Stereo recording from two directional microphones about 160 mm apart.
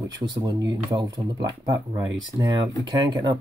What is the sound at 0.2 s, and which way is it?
Speech, 25° right (ahead or behind).